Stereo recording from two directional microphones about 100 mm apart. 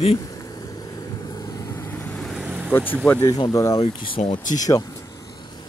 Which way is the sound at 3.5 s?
35° left (ahead or behind).